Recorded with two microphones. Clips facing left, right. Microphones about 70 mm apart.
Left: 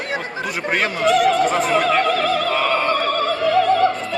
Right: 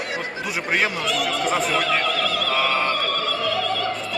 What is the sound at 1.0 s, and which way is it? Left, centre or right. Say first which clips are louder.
Speech: left 8 dB; left.